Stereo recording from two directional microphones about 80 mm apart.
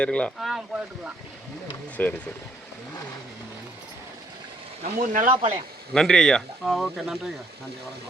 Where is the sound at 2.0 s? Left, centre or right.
Left.